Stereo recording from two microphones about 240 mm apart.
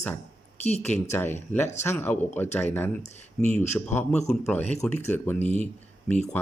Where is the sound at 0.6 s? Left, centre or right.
Left.